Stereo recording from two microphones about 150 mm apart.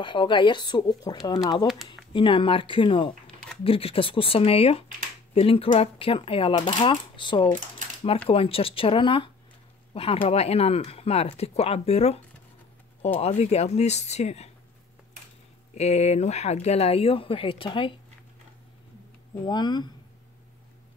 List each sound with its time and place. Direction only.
0.0 s speech: 35° left (ahead or behind)
3.3 s a sound: 5° left (ahead or behind)
3.6 s speech: 40° left (ahead or behind)
13.2 s speech: 45° left (ahead or behind)
15.7 s speech: 45° left (ahead or behind)
19.4 s speech: 30° left (ahead or behind)